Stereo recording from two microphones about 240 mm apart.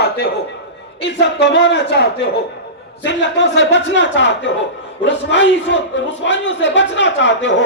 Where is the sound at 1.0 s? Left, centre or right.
Left.